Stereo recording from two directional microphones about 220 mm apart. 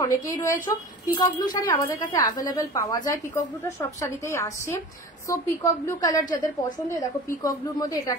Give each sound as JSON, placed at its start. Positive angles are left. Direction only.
{"t": 0.0, "sound": "a woman's voice", "side_deg": 15}